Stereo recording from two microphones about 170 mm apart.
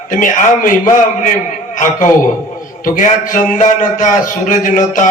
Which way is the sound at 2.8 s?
50° left (ahead or behind).